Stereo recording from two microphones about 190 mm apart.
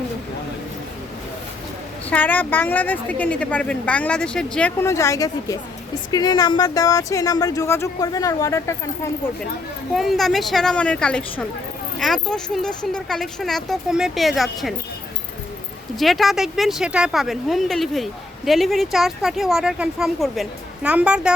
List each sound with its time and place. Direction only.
2.0 s a woman's voice: 10° left (ahead or behind)
9.9 s speech: centre (ahead or behind)
16.0 s speech: centre (ahead or behind)